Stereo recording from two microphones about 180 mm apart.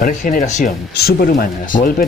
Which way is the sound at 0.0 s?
50° left (ahead or behind).